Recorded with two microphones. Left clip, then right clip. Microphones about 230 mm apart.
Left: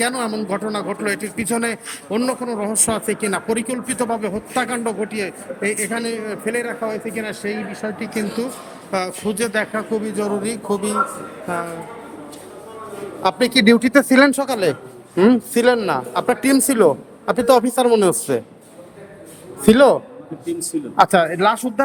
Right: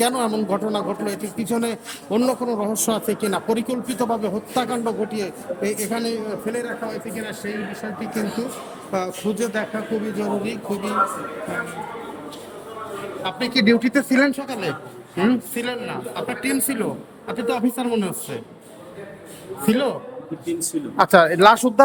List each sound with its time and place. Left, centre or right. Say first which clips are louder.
0.0 s a man's voice: right 1 dB; centre
13.2 s speech: left 5 dB; centre
19.6 s speech: left 10 dB; centre
20.9 s a man's voice: even; centre